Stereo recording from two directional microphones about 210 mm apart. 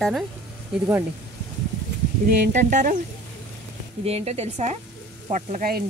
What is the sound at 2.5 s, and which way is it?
Speech, 35° right (ahead or behind).